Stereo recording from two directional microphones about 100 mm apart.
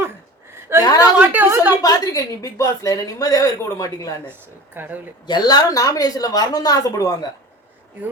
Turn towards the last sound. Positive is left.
turn(degrees=35)  # may be behind; listen again after turning